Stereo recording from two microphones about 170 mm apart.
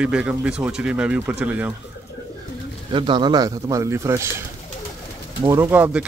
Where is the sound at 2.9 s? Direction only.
30° right (ahead or behind).